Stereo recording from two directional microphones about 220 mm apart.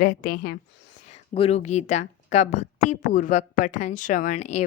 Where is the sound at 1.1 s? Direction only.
25° left (ahead or behind).